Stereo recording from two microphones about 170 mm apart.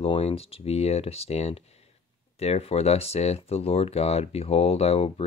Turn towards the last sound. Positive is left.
turn(degrees=35)  # may be behind; listen again after turning